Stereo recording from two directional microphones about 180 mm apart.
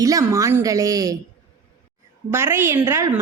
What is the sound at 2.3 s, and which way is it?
Speech, 15° right (ahead or behind).